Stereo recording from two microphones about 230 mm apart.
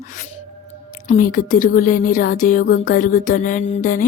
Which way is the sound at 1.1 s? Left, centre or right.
Left.